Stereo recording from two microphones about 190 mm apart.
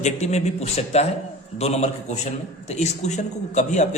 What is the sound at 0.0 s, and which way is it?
A man's voice, 35° left (ahead or behind).